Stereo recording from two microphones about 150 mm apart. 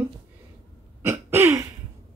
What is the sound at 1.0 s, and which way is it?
Throat clearing, 15° right (ahead or behind).